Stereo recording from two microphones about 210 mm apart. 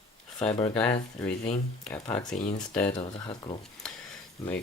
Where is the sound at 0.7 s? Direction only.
5° left (ahead or behind).